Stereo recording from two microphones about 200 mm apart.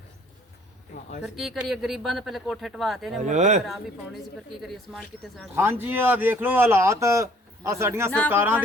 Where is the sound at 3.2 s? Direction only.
35° right (ahead or behind).